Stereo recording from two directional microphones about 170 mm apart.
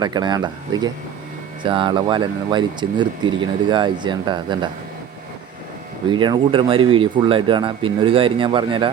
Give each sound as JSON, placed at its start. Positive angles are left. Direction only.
{"t": 0.0, "sound": "speech", "side_deg": -25}
{"t": 6.1, "sound": "speech", "side_deg": -25}